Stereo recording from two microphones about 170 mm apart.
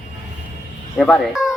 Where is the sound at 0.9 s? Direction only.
Centre (ahead or behind).